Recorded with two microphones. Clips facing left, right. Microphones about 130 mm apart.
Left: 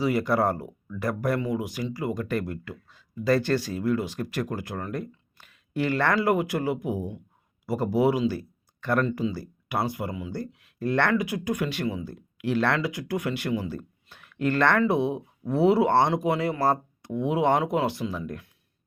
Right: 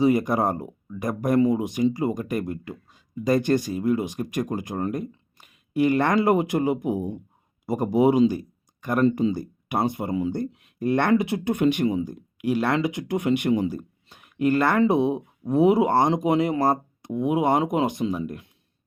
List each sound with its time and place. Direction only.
0.0 s speech: 20° right (ahead or behind)
8.3 s a sound: 15° right (ahead or behind)
9.0 s speech: 30° right (ahead or behind)
9.3 s speech: 20° right (ahead or behind)
11.1 s speech: 25° right (ahead or behind)